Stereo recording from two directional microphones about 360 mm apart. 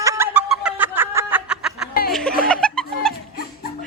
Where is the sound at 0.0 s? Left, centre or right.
Centre.